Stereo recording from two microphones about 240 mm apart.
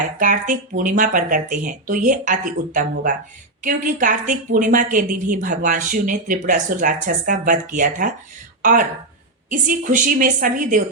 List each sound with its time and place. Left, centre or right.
0.2 s speech: right